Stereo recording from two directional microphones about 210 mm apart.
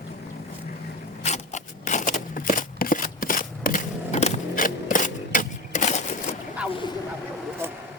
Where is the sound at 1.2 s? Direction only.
35° left (ahead or behind).